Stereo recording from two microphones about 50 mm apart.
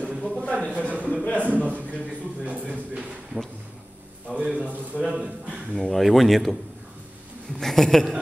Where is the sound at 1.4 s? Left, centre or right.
Right.